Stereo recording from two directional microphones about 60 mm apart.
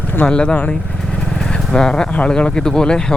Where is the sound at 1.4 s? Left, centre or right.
Centre.